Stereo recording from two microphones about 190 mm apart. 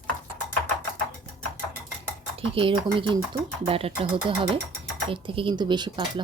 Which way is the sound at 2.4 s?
30° right (ahead or behind).